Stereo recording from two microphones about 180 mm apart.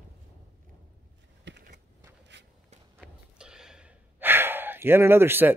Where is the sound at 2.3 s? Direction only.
85° right.